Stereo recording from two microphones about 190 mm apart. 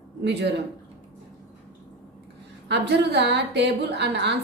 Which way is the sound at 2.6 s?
65° right (ahead or behind).